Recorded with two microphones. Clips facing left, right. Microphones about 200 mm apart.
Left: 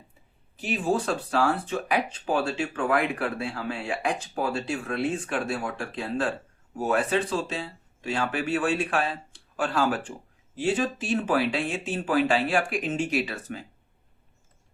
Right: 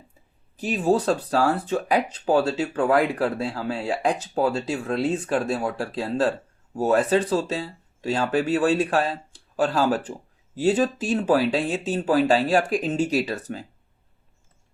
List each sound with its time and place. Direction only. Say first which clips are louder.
0.6 s speech: right 5 dB; 35° right (ahead or behind)
5.2 s speech: right 5 dB; 35° right (ahead or behind)